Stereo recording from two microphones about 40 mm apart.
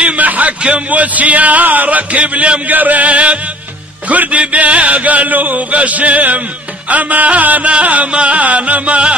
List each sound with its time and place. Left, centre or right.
0.0 s a man's voice: right
2.7 s chant: right